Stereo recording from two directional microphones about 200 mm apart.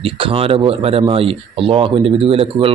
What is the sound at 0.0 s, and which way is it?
Speech, 30° right (ahead or behind).